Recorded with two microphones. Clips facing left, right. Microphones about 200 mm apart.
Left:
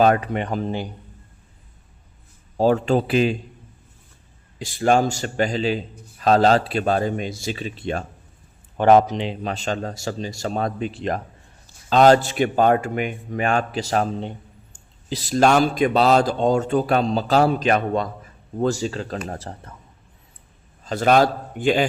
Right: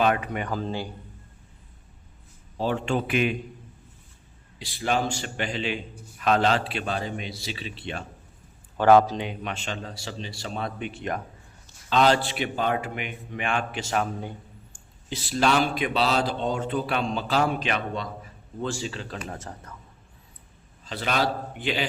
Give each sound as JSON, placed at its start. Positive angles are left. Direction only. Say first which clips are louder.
{"t": 0.0, "sound": "speech", "louder": "left 6 dB", "side_deg": 35}
{"t": 2.6, "sound": "speech", "louder": "left 8 dB", "side_deg": 40}
{"t": 4.6, "sound": "a man's voice", "louder": "left 8 dB", "side_deg": 45}
{"t": 8.8, "sound": "a man's voice", "louder": "left 3 dB", "side_deg": 20}
{"t": 20.8, "sound": "a man's voice", "louder": "left 9 dB", "side_deg": 45}